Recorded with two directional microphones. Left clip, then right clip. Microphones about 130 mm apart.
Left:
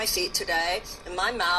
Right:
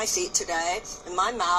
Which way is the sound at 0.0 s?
5° right (ahead or behind).